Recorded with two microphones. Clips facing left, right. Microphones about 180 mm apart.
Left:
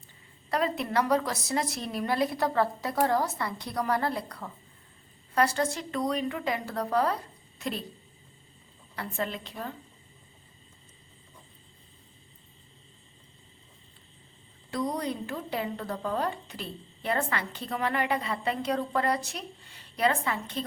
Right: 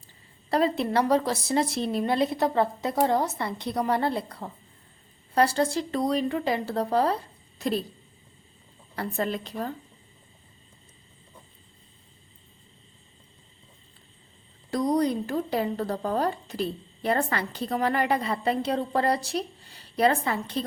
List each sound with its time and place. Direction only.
0.5 s a woman's voice: 30° right (ahead or behind)
9.0 s speech: 40° right (ahead or behind)
14.7 s speech: 40° right (ahead or behind)